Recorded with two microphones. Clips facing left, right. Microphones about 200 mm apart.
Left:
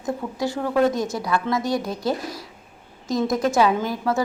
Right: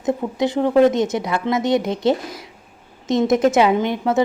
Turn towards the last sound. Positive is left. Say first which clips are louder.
# right 5 dB
turn(degrees=-20)  # may be behind; listen again after turning